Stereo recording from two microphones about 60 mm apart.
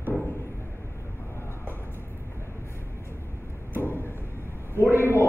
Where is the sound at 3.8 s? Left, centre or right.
Left.